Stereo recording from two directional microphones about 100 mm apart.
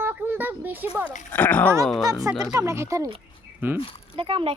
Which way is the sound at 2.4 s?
35° right (ahead or behind).